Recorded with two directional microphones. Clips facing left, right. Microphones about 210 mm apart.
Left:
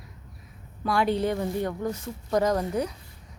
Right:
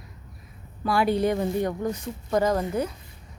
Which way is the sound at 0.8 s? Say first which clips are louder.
Right 2 dB; 5° right (ahead or behind).